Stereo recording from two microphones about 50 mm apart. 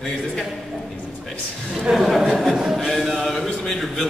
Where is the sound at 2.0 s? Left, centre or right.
Centre.